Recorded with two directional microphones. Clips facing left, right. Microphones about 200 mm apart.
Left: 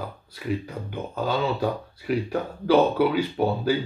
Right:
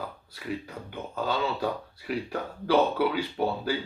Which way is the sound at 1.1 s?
20° left (ahead or behind).